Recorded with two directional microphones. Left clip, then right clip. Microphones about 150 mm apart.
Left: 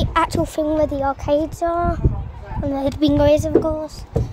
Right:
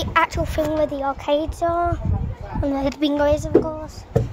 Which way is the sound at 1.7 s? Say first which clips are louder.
Left 1 dB; 10° left (ahead or behind).